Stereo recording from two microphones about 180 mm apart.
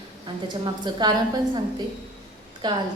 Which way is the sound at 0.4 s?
25° right (ahead or behind).